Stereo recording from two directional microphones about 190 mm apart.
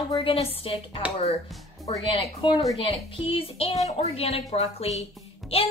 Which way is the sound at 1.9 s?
25° left (ahead or behind).